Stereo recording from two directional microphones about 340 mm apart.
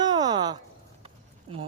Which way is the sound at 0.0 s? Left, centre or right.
Centre.